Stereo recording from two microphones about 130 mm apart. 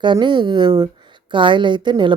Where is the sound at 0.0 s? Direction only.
35° right (ahead or behind).